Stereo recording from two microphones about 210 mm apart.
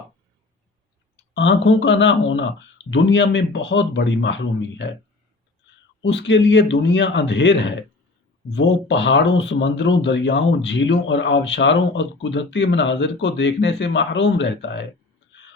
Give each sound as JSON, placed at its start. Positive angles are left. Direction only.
{"t": 1.4, "sound": "speech", "side_deg": 60}
{"t": 6.0, "sound": "speech", "side_deg": 60}